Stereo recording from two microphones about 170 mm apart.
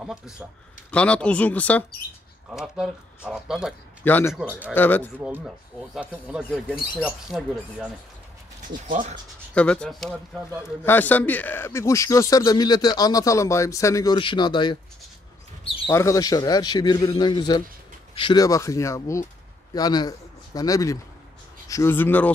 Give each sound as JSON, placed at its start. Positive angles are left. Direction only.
{"t": 0.0, "sound": "speech", "side_deg": -5}
{"t": 0.9, "sound": "speech", "side_deg": 5}
{"t": 2.5, "sound": "speech", "side_deg": -5}
{"t": 4.0, "sound": "speech", "side_deg": 10}
{"t": 4.3, "sound": "speech", "side_deg": -5}
{"t": 4.7, "sound": "speech", "side_deg": 10}
{"t": 5.9, "sound": "speech", "side_deg": -5}
{"t": 8.8, "sound": "speech", "side_deg": -50}
{"t": 9.5, "sound": "speech", "side_deg": 5}
{"t": 15.9, "sound": "a man's voice", "side_deg": 15}